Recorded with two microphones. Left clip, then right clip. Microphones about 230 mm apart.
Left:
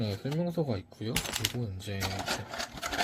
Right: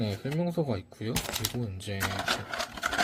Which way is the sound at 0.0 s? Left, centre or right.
Centre.